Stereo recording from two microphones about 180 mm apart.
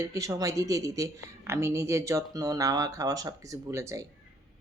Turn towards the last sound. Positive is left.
turn(degrees=-15)  # may be behind; listen again after turning